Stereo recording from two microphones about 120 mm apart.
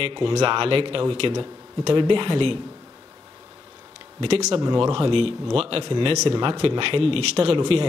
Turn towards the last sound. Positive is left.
turn(degrees=-45)  # may be behind; listen again after turning